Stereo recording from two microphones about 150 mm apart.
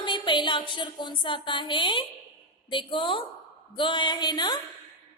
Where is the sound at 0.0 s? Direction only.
30° left (ahead or behind).